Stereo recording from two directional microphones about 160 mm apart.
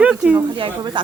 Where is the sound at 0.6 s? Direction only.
30° right (ahead or behind).